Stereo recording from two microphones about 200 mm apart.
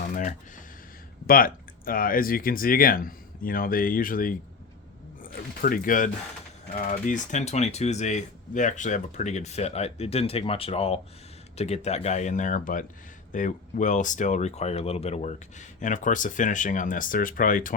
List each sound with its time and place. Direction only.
0.0 s typing: 40° left (ahead or behind)
1.3 s speech: 45° left (ahead or behind)